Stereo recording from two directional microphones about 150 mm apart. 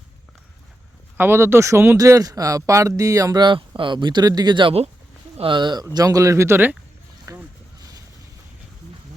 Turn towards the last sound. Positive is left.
turn(degrees=-20)  # may be behind; listen again after turning